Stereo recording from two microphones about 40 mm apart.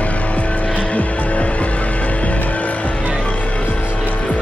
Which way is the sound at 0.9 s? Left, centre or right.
Left.